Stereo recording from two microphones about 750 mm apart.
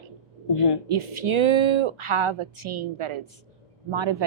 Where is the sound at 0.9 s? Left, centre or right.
Right.